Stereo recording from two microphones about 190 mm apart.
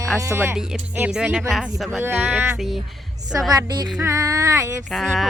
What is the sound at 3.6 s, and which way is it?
Speech, 20° right (ahead or behind).